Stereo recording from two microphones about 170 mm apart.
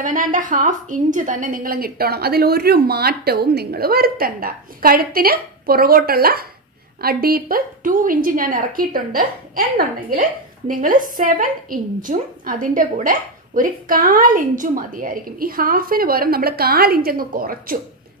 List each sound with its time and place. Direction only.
0.0 s a woman's voice: 50° right (ahead or behind)